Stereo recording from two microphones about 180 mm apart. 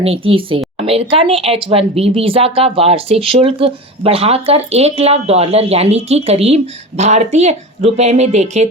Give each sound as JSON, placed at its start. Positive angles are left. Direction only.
{"t": 0.0, "sound": "speech", "side_deg": -30}